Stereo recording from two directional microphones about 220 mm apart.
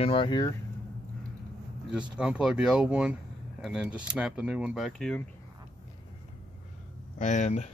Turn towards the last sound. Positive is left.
turn(degrees=30)  # may be behind; listen again after turning